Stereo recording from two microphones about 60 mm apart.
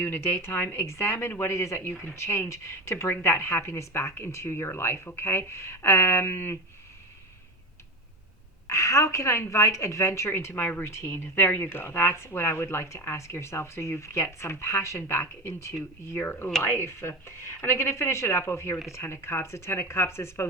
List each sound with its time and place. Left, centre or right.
0.0 s a woman's voice: left
8.6 s a woman's voice: left
16.1 s a woman's voice: left